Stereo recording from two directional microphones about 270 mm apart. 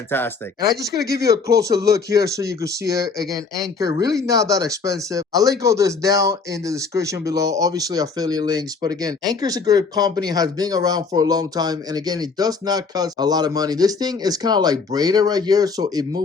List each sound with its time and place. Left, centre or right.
0.1 s speech: centre
1.5 s speech: centre